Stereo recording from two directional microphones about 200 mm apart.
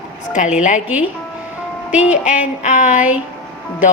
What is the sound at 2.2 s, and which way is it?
Speech, 35° left (ahead or behind).